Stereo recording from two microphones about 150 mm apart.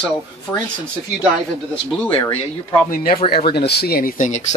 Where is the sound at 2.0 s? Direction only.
30° left (ahead or behind).